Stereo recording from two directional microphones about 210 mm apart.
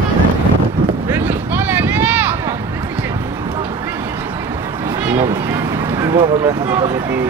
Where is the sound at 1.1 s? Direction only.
10° right (ahead or behind).